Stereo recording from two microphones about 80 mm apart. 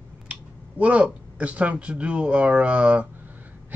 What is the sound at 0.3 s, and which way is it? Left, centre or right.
Speech, centre.